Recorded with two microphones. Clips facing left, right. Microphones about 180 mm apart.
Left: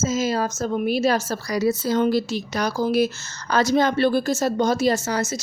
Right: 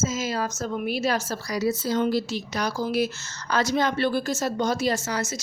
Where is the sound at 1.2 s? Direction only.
55° left (ahead or behind).